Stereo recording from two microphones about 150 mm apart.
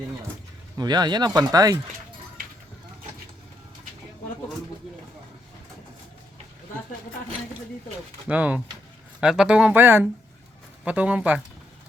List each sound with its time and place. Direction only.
0.8 s speech: 30° right (ahead or behind)
8.3 s speech: 10° right (ahead or behind)